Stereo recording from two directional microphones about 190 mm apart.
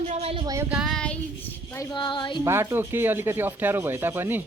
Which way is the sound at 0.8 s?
Centre (ahead or behind).